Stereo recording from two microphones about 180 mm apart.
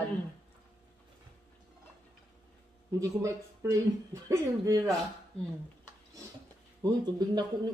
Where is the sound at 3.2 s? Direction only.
15° right (ahead or behind).